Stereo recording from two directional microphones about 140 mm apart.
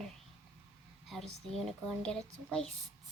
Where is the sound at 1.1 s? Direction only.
Centre (ahead or behind).